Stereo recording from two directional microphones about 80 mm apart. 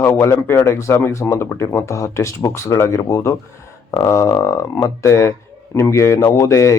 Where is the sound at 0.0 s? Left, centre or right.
Left.